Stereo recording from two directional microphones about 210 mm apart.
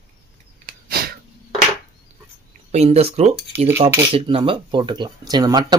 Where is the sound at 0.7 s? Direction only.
45° right (ahead or behind).